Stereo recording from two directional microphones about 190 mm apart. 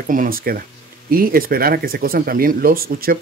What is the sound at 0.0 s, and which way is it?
Speech, 45° right (ahead or behind).